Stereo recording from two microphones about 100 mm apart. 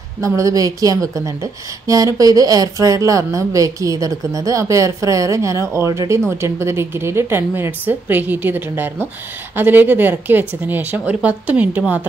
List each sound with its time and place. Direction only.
0.2 s a woman's voice: 35° right (ahead or behind); by 12.1 s 15° right (ahead or behind)